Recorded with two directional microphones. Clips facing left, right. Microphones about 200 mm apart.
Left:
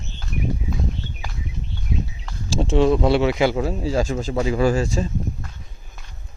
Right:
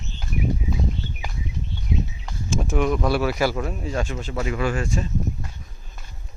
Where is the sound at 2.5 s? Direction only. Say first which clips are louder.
Left 5 dB; 30° left (ahead or behind).